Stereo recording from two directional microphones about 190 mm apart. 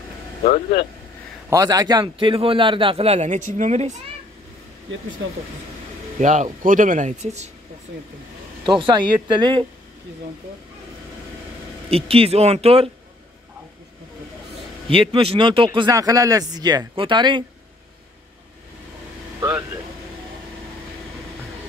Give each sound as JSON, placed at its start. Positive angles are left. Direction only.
{"t": 1.5, "sound": "speech", "side_deg": -20}
{"t": 6.1, "sound": "speech", "side_deg": -40}
{"t": 8.6, "sound": "speech", "side_deg": -25}
{"t": 11.9, "sound": "speech", "side_deg": -30}
{"t": 14.9, "sound": "speech", "side_deg": -30}